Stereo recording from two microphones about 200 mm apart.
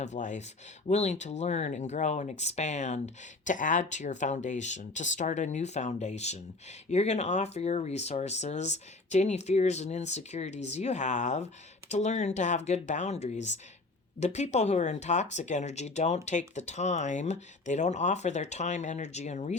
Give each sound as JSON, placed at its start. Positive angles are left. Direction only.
{"t": 0.0, "sound": "speech", "side_deg": 35}